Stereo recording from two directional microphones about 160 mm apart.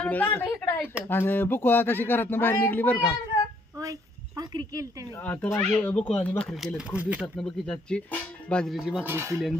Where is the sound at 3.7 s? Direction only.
20° right (ahead or behind).